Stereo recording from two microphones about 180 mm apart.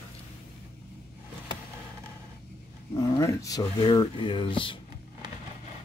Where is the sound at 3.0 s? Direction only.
15° left (ahead or behind).